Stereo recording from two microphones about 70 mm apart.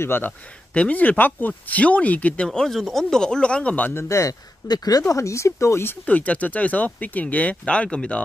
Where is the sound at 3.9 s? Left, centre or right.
Left.